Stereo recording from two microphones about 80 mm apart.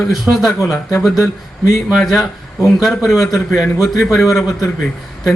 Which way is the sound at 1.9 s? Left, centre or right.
Centre.